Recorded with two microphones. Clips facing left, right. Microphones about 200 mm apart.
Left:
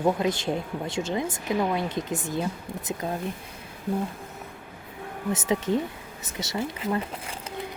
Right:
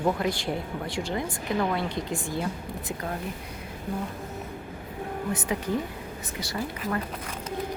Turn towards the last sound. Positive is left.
turn(degrees=20)  # may be behind; listen again after turning